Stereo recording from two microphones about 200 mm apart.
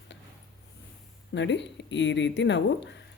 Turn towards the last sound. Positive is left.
turn(degrees=60)  # may be behind; listen again after turning